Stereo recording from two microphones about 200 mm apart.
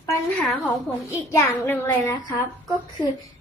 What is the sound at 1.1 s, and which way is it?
A child's voice, 15° left (ahead or behind).